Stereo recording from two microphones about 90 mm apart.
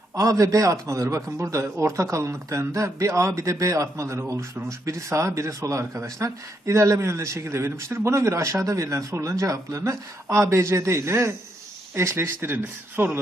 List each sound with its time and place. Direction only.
0.2 s speech: 40° right (ahead or behind)